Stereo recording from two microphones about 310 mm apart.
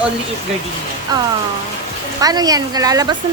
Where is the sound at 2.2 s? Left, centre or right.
Centre.